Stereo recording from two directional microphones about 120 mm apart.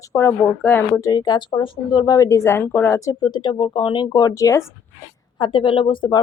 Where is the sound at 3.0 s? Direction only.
35° left (ahead or behind).